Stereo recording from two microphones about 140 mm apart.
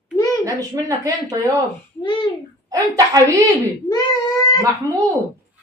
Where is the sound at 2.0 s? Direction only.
35° left (ahead or behind).